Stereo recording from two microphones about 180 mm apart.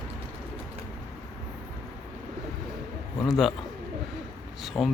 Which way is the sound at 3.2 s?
Centre (ahead or behind).